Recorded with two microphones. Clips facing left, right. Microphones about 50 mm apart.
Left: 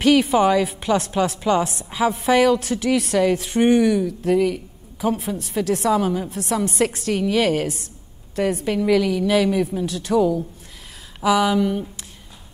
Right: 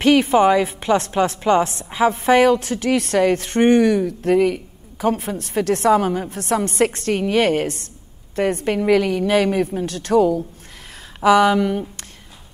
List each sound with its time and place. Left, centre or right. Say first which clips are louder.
0.0 s a woman's voice: right 2 dB; right
8.6 s a woman's voice: right 2 dB; right
9.8 s speech: right 4 dB; right
11.2 s a woman's voice: right 4 dB; right